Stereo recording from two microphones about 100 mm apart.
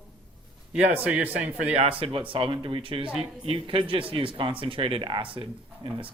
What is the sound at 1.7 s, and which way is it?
Speech, 70° right (ahead or behind).